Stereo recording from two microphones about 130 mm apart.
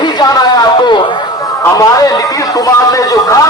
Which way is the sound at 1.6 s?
25° left (ahead or behind).